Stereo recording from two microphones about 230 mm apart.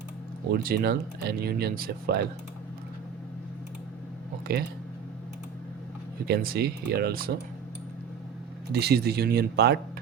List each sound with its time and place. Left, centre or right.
0.5 s speech: right
4.5 s speech: right
6.2 s speech: right
8.7 s speech: right